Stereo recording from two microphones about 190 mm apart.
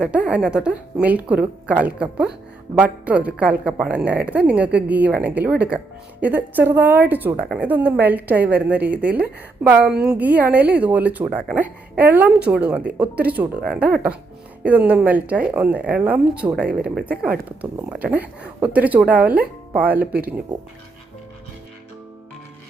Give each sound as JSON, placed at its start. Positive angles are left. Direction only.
{"t": 0.0, "sound": "a woman's voice", "side_deg": -5}
{"t": 16.8, "sound": "speech", "side_deg": -55}
{"t": 17.8, "sound": "a woman's voice", "side_deg": -5}
{"t": 20.0, "sound": "speech", "side_deg": -50}